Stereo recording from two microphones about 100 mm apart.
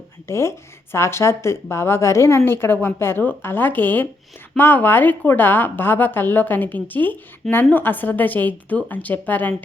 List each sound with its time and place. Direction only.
0.3 s a woman's voice: 25° left (ahead or behind)